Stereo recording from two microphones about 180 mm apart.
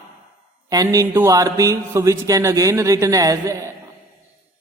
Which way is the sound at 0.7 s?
20° right (ahead or behind).